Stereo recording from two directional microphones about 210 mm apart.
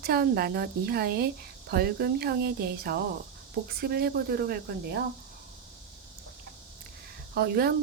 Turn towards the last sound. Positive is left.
turn(degrees=-50)  # may be behind; listen again after turning